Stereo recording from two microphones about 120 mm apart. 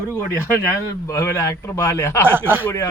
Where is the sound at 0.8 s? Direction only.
25° left (ahead or behind).